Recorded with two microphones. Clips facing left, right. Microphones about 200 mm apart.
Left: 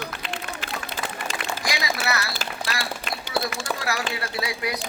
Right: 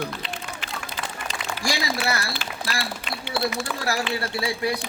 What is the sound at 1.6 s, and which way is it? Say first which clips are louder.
Speech: right 3 dB; 25° right (ahead or behind).